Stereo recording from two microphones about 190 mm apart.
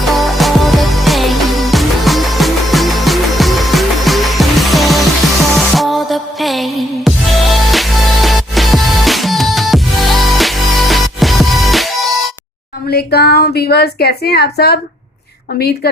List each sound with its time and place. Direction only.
0.0 s music: centre (ahead or behind)
12.9 s a woman's voice: 55° left (ahead or behind)